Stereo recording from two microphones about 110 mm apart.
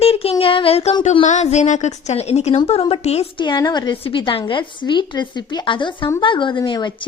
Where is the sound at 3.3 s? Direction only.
45° left (ahead or behind).